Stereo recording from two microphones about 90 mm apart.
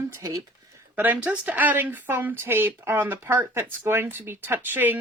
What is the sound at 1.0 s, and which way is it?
Speech, 20° right (ahead or behind).